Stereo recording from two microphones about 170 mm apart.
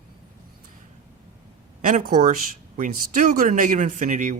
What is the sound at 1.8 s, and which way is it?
Speech, 50° right (ahead or behind).